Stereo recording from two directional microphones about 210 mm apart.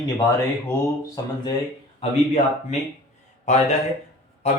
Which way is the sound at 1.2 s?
15° left (ahead or behind).